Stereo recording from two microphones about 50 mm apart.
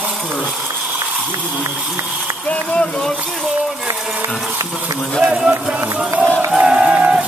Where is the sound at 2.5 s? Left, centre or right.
Left.